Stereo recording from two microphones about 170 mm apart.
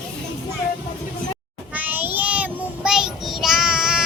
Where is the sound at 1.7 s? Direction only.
10° right (ahead or behind).